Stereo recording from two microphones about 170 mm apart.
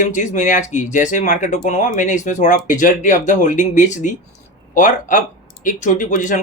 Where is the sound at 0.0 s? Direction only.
45° left (ahead or behind).